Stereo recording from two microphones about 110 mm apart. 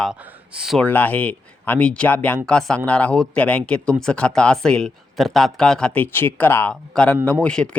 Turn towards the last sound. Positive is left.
turn(degrees=10)  # may be behind; listen again after turning